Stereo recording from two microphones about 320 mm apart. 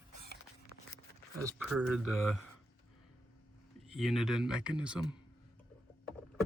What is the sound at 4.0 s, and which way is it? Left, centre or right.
Speech, centre.